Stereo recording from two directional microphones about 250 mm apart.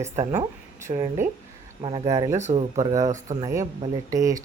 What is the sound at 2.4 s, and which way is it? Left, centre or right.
Speech, right.